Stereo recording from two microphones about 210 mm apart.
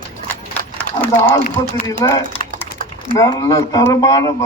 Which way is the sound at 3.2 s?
15° left (ahead or behind).